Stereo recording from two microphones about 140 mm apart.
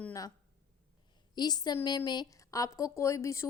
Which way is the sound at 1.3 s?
30° left (ahead or behind).